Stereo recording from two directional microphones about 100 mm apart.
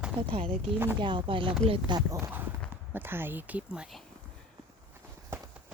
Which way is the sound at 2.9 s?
20° right (ahead or behind).